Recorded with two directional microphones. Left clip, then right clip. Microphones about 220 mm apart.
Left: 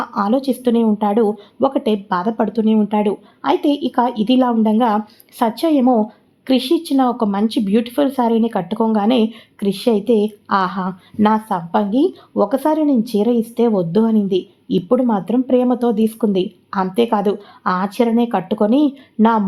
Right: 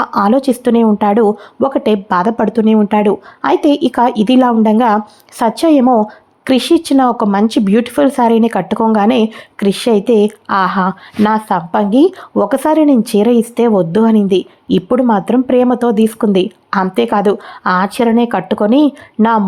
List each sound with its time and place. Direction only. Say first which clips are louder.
0.0 s speech: right 7 dB; 25° right (ahead or behind)